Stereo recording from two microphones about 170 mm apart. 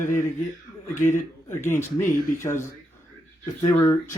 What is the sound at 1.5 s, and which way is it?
Speech, 15° left (ahead or behind).